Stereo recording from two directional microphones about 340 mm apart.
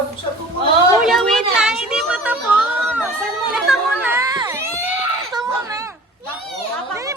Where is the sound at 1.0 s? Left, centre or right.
Centre.